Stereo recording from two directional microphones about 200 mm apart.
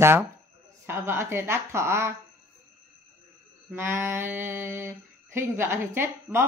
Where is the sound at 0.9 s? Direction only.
10° right (ahead or behind).